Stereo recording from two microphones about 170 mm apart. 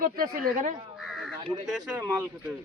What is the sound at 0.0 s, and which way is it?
Speech, 55° right (ahead or behind).